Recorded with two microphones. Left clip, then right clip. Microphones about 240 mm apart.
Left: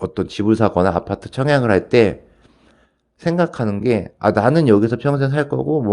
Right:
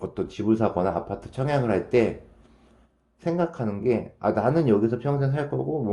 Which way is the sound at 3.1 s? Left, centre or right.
Left.